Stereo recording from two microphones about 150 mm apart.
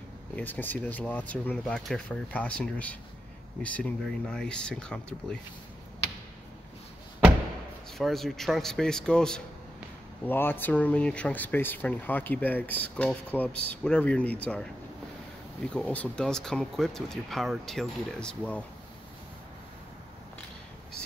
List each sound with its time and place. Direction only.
0.4 s speech: 10° left (ahead or behind)
8.0 s speech: centre (ahead or behind)